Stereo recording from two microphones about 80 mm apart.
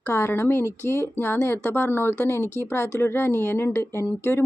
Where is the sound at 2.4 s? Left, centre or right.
Right.